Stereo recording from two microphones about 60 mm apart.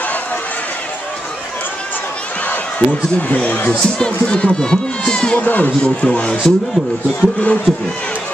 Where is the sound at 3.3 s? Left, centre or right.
Left.